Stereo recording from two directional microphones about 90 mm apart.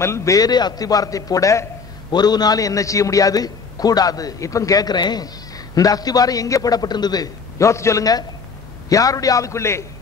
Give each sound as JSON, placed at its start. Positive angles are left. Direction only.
{"t": 0.0, "sound": "a man's voice", "side_deg": 35}
{"t": 2.1, "sound": "a man's voice", "side_deg": 50}